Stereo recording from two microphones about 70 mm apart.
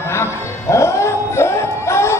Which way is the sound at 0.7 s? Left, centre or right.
Left.